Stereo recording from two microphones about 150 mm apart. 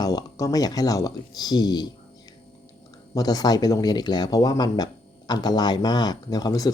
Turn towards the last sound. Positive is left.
turn(degrees=25)  # may be behind; listen again after turning